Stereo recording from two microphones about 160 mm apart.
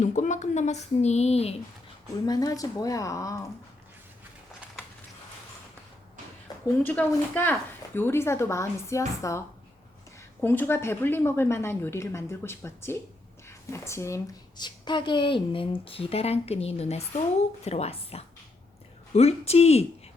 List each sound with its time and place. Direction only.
0.0 s speech: 50° left (ahead or behind)
2.2 s speech: 25° left (ahead or behind)
6.5 s a sound: 25° left (ahead or behind)
6.8 s a woman's voice: 10° left (ahead or behind)
10.4 s a woman's voice: 15° left (ahead or behind)
14.6 s a woman's voice: 30° left (ahead or behind)